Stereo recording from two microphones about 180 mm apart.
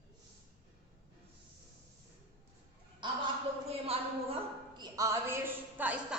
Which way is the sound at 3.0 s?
25° right (ahead or behind).